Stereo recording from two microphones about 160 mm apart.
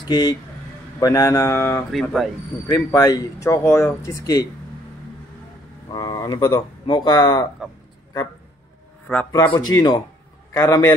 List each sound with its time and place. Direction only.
0.1 s speech: 25° left (ahead or behind)
1.9 s speech: centre (ahead or behind)
2.7 s speech: 20° left (ahead or behind)
5.9 s speech: 25° left (ahead or behind)
9.0 s a man's voice: 10° left (ahead or behind)
9.3 s speech: 25° left (ahead or behind)